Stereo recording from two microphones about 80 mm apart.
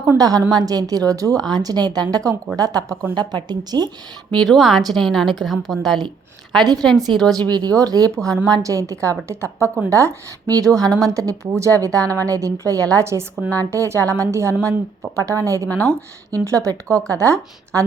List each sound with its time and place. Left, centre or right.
0.2 s a woman's voice: right
3.2 s speech: right
4.4 s a woman's voice: centre
7.5 s a woman's voice: right